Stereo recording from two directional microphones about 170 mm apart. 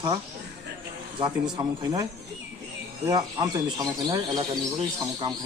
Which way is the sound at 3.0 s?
25° right (ahead or behind).